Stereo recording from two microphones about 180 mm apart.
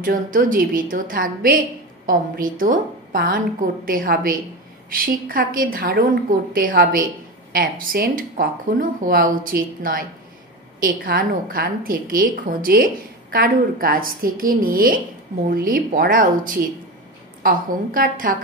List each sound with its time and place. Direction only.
0.0 s a woman's voice: 50° right (ahead or behind)